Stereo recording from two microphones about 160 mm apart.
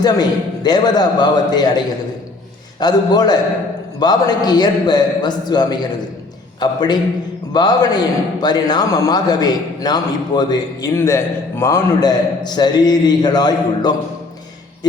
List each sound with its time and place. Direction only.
0.0 s a man's voice: 25° left (ahead or behind)
2.8 s a man's voice: 25° left (ahead or behind)